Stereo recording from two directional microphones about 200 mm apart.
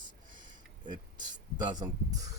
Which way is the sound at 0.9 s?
20° right (ahead or behind).